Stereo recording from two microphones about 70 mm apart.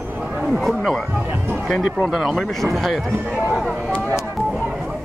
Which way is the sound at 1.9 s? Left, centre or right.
Centre.